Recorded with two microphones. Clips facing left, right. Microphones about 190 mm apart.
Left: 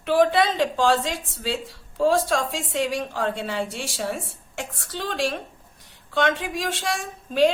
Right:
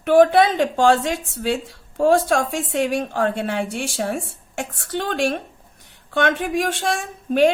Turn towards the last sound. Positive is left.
turn(degrees=-55)  # may be behind; listen again after turning